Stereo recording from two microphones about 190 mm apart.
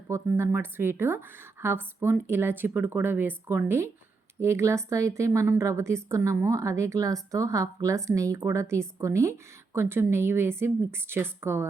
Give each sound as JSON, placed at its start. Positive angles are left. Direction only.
{"t": 0.1, "sound": "a woman's voice", "side_deg": -10}